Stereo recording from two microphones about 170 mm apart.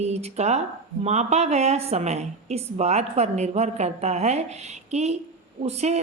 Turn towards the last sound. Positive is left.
turn(degrees=-40)  # may be behind; listen again after turning